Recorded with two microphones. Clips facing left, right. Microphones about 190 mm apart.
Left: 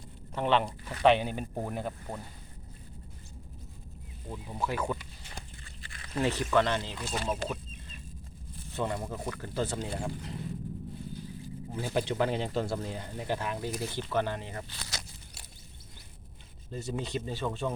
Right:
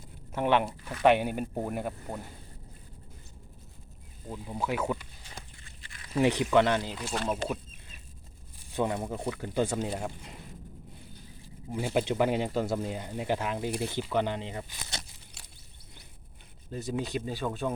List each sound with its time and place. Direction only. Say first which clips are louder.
0.3 s speech: right 1 dB; 10° right (ahead or behind)
4.3 s speech: right 2 dB; 10° right (ahead or behind)
5.6 s a sound: left 3 dB; 35° left (ahead or behind)
6.1 s speech: right 3 dB; 15° right (ahead or behind)
7.3 s a sound: right 2 dB; 10° right (ahead or behind)
8.7 s speech: right 3 dB; 15° right (ahead or behind)
11.7 s speech: right 3 dB; 15° right (ahead or behind)
16.7 s speech: right 2 dB; 10° right (ahead or behind)